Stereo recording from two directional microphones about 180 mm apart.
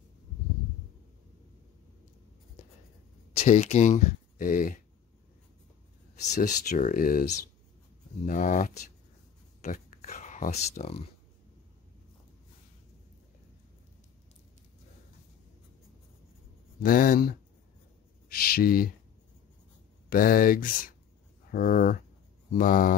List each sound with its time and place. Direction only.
3.3 s speech: 40° left (ahead or behind)
6.2 s speech: 40° left (ahead or behind)
16.8 s speech: 50° left (ahead or behind)
18.3 s speech: 55° left (ahead or behind)
20.1 s speech: 50° left (ahead or behind)